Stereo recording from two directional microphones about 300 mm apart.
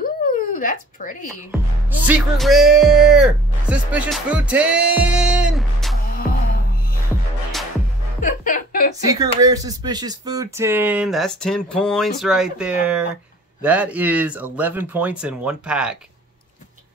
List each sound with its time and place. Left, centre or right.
0.0 s a sound: left
2.0 s speech: centre
8.2 s speech: left
9.1 s speech: centre